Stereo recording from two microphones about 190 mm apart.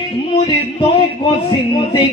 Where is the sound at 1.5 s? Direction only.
25° left (ahead or behind).